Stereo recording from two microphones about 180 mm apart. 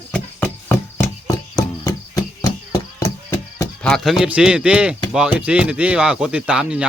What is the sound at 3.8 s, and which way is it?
Speech, centre (ahead or behind).